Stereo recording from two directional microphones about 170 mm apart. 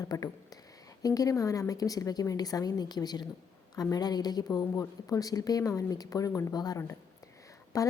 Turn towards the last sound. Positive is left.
turn(degrees=20)  # may be behind; listen again after turning